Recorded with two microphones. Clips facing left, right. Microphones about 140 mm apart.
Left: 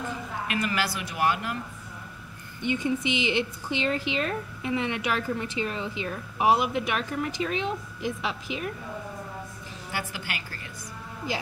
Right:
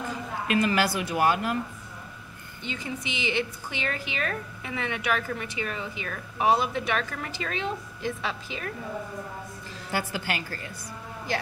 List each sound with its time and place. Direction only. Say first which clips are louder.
0.5 s speech: right 5 dB; 25° right (ahead or behind)
2.6 s a woman's voice: left 8 dB; 20° left (ahead or behind)
9.9 s a woman's voice: right 5 dB; 40° right (ahead or behind)